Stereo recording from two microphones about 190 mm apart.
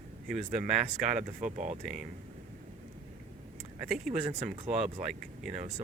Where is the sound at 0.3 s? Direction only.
40° right (ahead or behind).